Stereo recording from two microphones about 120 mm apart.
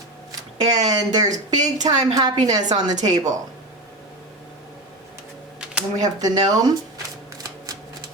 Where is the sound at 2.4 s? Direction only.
35° right (ahead or behind).